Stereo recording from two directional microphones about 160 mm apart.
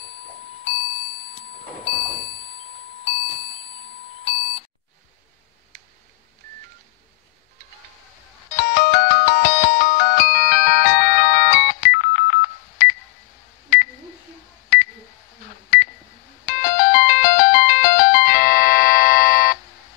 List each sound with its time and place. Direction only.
1.9 s a sound: 35° left (ahead or behind)
8.5 s ringtone: 55° left (ahead or behind)
16.4 s music: 55° left (ahead or behind)